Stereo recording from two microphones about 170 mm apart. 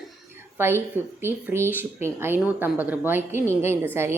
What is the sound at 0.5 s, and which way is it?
A woman's voice, 15° right (ahead or behind).